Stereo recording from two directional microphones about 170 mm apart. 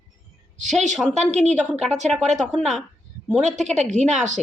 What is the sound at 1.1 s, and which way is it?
Speech, 40° right (ahead or behind).